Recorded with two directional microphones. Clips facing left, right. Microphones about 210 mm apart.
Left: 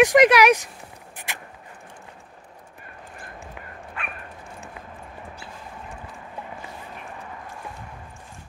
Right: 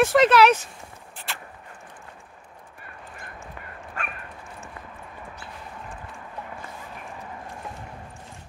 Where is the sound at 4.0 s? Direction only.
45° right (ahead or behind).